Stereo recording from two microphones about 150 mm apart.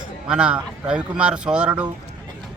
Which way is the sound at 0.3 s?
5° right (ahead or behind).